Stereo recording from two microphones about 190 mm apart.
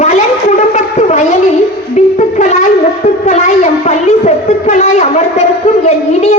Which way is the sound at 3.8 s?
35° left (ahead or behind).